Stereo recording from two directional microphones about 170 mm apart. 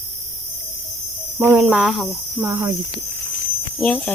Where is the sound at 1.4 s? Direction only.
15° right (ahead or behind).